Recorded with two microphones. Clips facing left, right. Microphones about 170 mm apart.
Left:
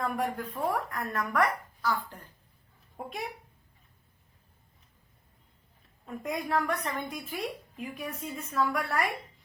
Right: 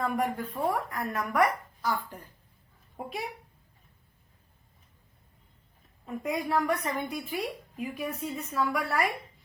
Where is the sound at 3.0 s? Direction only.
5° right (ahead or behind).